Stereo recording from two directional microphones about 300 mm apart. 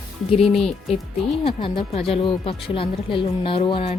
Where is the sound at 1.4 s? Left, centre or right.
Centre.